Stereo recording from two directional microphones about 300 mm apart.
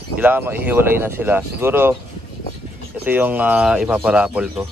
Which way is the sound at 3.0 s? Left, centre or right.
Centre.